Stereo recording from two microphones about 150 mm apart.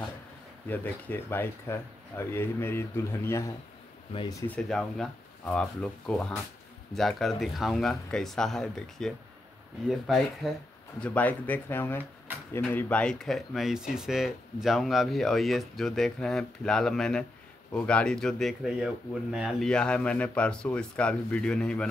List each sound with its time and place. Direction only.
0.7 s speech: 15° left (ahead or behind)
4.5 s speech: 5° left (ahead or behind)
11.0 s speech: 10° left (ahead or behind)